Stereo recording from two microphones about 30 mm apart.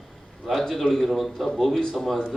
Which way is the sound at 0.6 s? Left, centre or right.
Centre.